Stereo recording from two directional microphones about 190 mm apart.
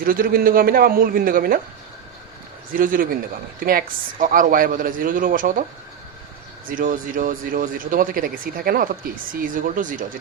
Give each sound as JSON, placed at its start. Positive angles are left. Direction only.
{"t": 0.0, "sound": "speech", "side_deg": -50}
{"t": 2.7, "sound": "speech", "side_deg": -45}
{"t": 6.7, "sound": "speech", "side_deg": -45}